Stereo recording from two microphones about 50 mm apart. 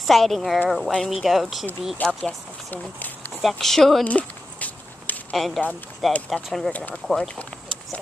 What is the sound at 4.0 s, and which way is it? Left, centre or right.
Walk, left.